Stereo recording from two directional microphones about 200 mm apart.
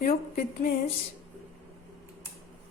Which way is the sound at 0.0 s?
45° left (ahead or behind).